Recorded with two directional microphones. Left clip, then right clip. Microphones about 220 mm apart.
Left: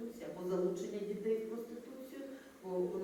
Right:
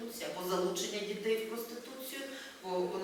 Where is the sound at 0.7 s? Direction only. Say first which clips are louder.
Right 3 dB; 5° left (ahead or behind).